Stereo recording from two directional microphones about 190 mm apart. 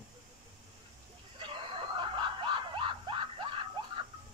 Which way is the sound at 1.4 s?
25° right (ahead or behind).